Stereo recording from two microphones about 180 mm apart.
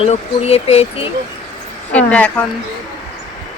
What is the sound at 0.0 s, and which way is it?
Speech, 35° left (ahead or behind).